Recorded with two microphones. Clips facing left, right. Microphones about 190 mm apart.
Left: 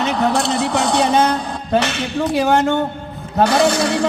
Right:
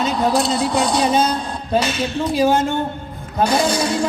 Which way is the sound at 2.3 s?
65° left (ahead or behind).